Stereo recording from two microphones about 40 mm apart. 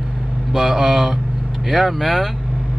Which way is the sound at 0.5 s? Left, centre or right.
Centre.